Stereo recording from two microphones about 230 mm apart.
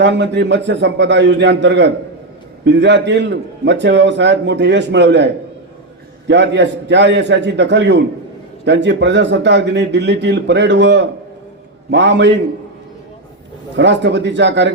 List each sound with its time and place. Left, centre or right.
0.0 s a man's voice: right
13.7 s a man's voice: right